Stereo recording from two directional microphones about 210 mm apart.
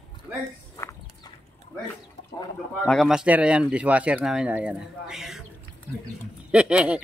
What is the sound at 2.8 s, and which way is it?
Speech, centre (ahead or behind).